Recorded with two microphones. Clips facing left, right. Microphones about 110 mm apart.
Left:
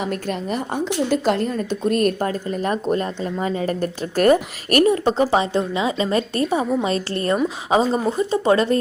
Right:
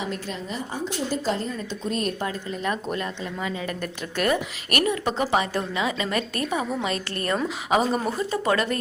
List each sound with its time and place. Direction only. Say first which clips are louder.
0.0 s a woman's voice: left 6 dB; 55° left (ahead or behind); by 8.8 s 30° left (ahead or behind)